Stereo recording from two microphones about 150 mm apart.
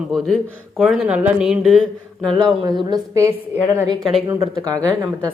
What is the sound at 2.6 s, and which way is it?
Speech, 25° right (ahead or behind).